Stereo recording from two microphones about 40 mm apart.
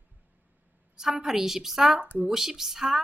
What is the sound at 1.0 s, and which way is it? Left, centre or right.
Speech, centre.